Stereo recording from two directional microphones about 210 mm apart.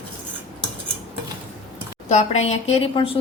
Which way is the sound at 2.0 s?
30° left (ahead or behind).